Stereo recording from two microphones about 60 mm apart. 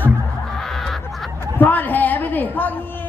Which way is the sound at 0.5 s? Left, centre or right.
Centre.